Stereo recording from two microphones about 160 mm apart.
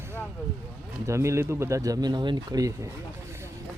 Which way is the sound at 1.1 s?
15° right (ahead or behind).